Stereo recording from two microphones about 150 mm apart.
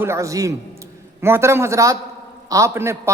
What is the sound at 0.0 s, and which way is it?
A man's voice, 20° right (ahead or behind).